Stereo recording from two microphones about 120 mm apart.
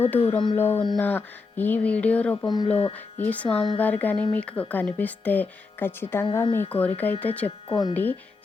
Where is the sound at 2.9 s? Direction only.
15° left (ahead or behind).